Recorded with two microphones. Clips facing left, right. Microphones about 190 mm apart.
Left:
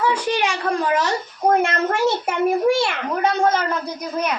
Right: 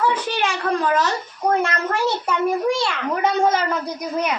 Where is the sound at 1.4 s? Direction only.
25° left (ahead or behind).